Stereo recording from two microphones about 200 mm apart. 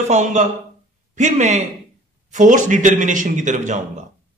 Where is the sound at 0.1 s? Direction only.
35° right (ahead or behind).